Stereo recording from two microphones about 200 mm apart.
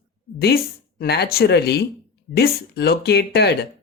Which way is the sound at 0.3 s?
50° left (ahead or behind).